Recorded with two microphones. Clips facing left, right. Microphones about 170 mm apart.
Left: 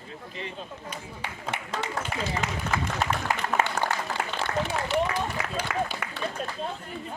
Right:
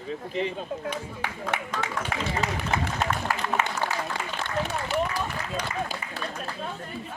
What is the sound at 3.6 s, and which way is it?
Applause, 40° left (ahead or behind).